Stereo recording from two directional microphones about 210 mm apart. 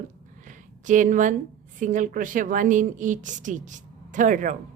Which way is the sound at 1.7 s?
35° right (ahead or behind).